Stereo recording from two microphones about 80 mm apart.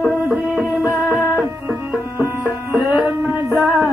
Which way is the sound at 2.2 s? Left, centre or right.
Left.